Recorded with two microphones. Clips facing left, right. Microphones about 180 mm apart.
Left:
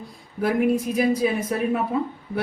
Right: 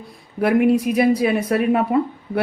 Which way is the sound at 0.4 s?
70° right (ahead or behind).